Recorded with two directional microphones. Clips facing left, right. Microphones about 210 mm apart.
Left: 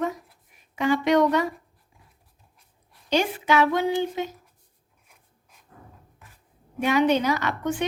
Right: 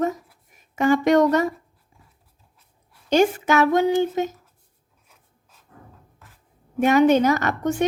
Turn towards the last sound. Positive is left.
turn(degrees=-45)  # may be behind; listen again after turning